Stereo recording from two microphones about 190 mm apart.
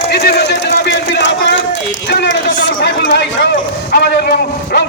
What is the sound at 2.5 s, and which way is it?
A man's voice, 50° left (ahead or behind).